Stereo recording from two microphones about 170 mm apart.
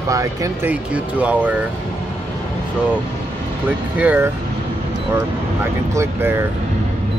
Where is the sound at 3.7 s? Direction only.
10° right (ahead or behind).